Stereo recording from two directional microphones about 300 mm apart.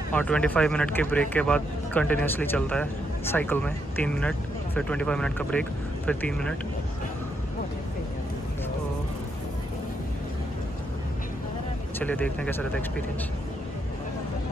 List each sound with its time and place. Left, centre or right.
0.1 s speech: centre
12.0 s speech: centre